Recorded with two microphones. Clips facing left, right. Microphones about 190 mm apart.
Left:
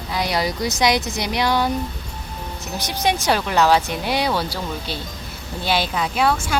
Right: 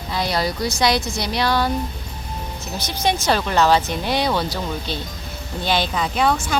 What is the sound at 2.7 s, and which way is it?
Speech, 15° left (ahead or behind).